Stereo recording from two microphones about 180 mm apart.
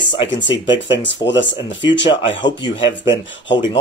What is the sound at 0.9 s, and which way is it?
Speech, 85° left.